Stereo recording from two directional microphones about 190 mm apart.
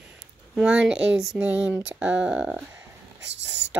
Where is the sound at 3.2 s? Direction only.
70° right (ahead or behind).